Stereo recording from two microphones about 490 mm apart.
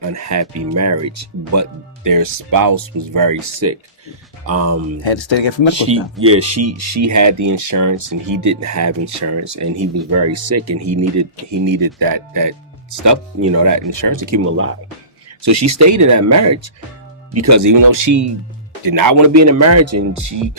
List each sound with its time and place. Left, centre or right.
0.0 s speech: right
5.0 s speech: left
5.7 s speech: right